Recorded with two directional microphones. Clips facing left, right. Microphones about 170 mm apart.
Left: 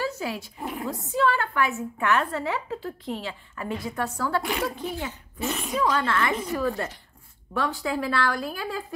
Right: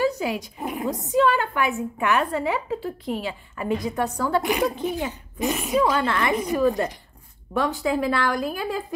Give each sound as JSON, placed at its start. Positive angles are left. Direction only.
{"t": 0.0, "sound": "a woman's voice", "side_deg": -15}